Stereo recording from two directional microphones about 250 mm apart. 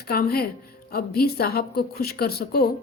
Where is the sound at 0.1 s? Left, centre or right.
Left.